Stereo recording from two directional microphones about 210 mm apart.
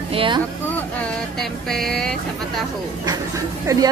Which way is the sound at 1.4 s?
Centre (ahead or behind).